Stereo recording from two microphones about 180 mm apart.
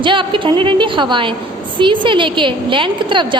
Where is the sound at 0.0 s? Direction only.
25° right (ahead or behind).